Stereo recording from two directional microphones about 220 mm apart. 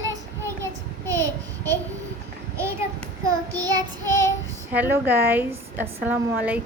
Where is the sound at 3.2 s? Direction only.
15° right (ahead or behind).